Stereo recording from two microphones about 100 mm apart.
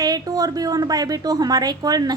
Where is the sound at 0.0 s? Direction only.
40° right (ahead or behind).